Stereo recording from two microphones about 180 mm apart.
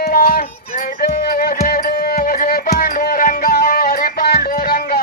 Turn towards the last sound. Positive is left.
turn(degrees=60)  # may be behind; listen again after turning